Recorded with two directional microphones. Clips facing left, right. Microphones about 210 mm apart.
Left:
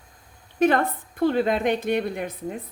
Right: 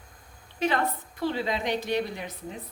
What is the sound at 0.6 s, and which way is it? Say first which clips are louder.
A woman's voice: left 7 dB; 50° left (ahead or behind).